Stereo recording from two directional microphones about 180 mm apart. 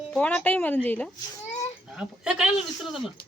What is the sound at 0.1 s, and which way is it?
A child's voice, 10° left (ahead or behind).